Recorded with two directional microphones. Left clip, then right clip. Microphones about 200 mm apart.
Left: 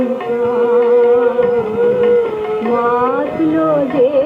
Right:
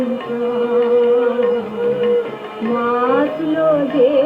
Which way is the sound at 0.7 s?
35° left (ahead or behind).